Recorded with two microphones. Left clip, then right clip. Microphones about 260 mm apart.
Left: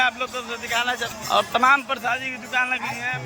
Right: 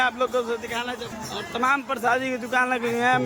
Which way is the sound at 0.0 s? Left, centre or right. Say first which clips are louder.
Even; centre.